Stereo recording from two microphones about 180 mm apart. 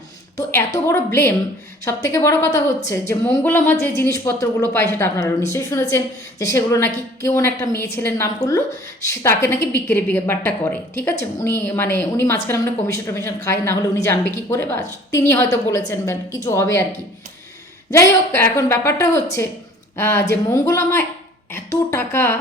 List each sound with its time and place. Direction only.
0.3 s a woman's voice: 15° left (ahead or behind)